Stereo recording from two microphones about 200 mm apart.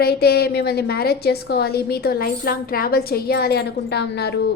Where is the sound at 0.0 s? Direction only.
50° left (ahead or behind).